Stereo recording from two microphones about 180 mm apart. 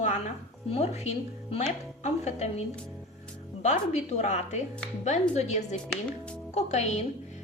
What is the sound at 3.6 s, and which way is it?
A woman's voice, 40° left (ahead or behind).